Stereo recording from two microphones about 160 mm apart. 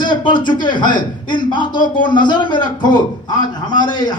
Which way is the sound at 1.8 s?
55° left (ahead or behind).